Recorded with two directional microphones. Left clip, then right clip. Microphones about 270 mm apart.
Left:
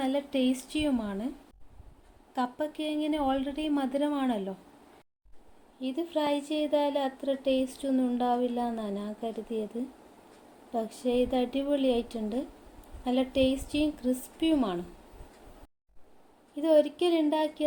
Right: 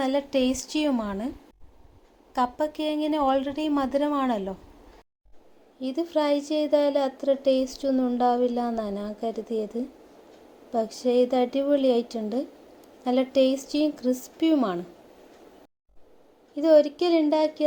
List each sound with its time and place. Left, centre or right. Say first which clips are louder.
0.0 s a woman's voice: right 5 dB; centre
2.3 s a woman's voice: right 6 dB; centre
5.8 s a woman's voice: right 5 dB; centre
10.7 s a woman's voice: right 6 dB; centre
16.6 s a woman's voice: right 5 dB; centre